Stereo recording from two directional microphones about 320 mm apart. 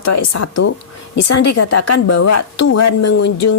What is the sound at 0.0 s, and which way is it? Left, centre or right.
A woman's voice, left.